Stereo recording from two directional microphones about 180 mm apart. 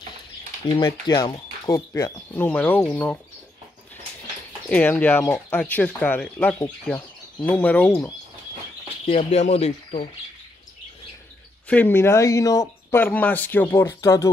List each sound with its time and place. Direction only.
0.7 s speech: 25° left (ahead or behind)
4.6 s speech: 5° left (ahead or behind)
9.0 s speech: 35° left (ahead or behind)
11.6 s speech: 10° left (ahead or behind)